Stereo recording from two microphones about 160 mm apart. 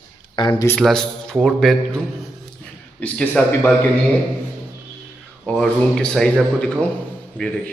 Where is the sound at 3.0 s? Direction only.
10° left (ahead or behind).